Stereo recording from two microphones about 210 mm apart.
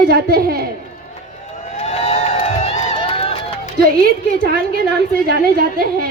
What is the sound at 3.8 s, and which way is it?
A woman's voice, 45° right (ahead or behind).